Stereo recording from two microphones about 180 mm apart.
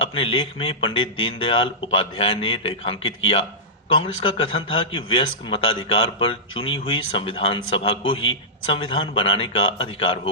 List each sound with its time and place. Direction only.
0.0 s a man's voice: 30° left (ahead or behind)